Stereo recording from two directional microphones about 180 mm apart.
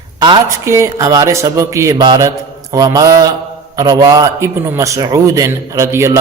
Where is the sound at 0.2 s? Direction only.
20° right (ahead or behind).